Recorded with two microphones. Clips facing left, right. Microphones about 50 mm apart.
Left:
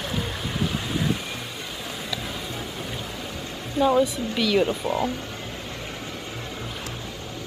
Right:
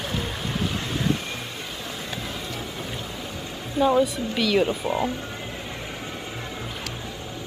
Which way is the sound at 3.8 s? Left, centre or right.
Centre.